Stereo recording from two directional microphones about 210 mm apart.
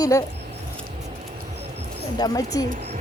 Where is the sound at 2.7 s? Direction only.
30° right (ahead or behind).